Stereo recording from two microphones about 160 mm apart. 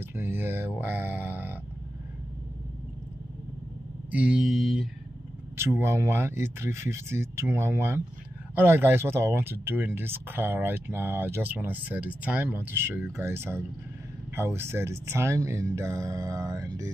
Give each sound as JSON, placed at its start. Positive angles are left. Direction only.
{"t": 0.1, "sound": "a sound", "side_deg": -15}
{"t": 4.1, "sound": "mantra", "side_deg": -5}
{"t": 5.6, "sound": "speech", "side_deg": -15}